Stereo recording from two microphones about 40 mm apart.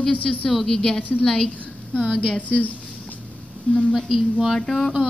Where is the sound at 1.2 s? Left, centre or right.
Centre.